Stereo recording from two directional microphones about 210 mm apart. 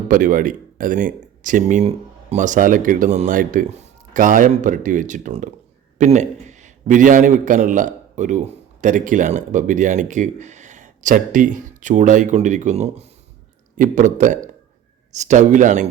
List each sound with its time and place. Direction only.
0.1 s a man's voice: 40° right (ahead or behind)